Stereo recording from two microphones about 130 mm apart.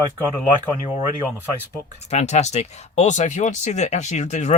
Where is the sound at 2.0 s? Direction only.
55° left (ahead or behind).